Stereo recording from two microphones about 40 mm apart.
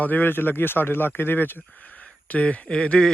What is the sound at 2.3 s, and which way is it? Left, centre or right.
Speech, left.